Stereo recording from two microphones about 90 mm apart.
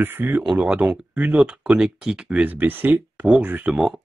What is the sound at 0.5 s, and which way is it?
Speech, 10° right (ahead or behind).